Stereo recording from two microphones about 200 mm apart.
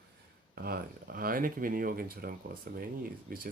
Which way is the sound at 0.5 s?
50° right (ahead or behind).